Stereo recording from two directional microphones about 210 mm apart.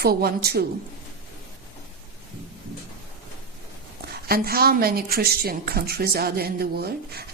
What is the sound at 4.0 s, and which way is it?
A woman's voice, 45° right (ahead or behind).